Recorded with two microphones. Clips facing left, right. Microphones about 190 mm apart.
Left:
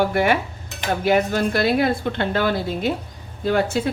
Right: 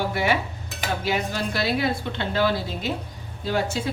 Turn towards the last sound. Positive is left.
turn(degrees=55)  # may be behind; listen again after turning